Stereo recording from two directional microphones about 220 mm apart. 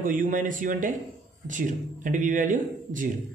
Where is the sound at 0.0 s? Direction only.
35° right (ahead or behind).